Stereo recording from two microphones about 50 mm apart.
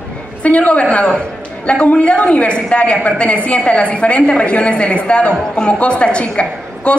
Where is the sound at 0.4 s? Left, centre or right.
Left.